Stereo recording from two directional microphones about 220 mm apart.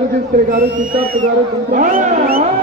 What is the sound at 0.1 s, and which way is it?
A man's voice, 40° right (ahead or behind).